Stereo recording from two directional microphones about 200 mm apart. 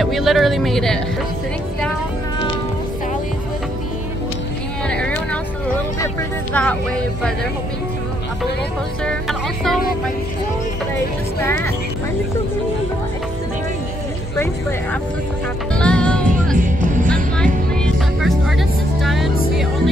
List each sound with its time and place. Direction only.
0.0 s speech: centre (ahead or behind)
4.8 s a sound: 5° left (ahead or behind)
6.5 s speech: 5° left (ahead or behind)
9.0 s speech: centre (ahead or behind)
11.4 s speech: 10° left (ahead or behind)
14.3 s speech: 15° left (ahead or behind)
15.7 s music: 5° left (ahead or behind)
16.5 s music: 40° right (ahead or behind)
17.9 s music: centre (ahead or behind)